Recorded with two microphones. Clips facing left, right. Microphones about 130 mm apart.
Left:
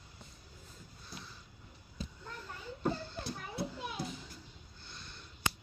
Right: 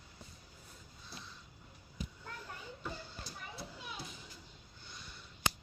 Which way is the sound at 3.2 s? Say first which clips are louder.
Left 7 dB; 60° left (ahead or behind).